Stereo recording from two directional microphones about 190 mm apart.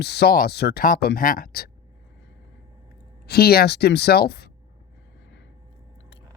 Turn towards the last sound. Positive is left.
turn(degrees=55)  # may be behind; listen again after turning